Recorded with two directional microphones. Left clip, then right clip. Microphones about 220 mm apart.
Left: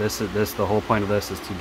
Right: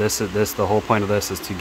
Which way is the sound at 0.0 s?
20° right (ahead or behind).